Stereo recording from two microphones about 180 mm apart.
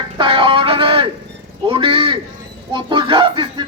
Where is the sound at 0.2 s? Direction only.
30° right (ahead or behind).